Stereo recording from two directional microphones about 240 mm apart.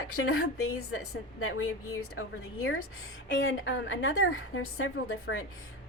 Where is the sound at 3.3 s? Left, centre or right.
Left.